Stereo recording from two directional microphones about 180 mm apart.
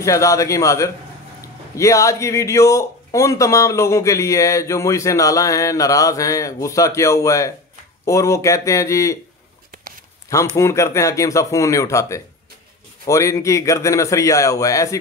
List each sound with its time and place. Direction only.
0.0 s speech: 15° left (ahead or behind)
10.5 s speech: 15° left (ahead or behind)